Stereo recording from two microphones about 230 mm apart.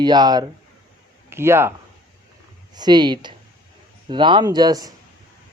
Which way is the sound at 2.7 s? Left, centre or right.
Centre.